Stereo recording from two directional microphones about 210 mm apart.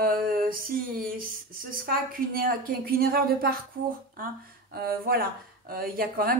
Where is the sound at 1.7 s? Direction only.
45° right (ahead or behind).